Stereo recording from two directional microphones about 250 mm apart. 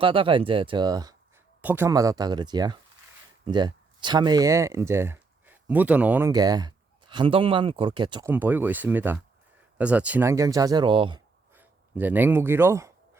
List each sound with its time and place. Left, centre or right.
0.0 s speech: right
11.5 s speech: centre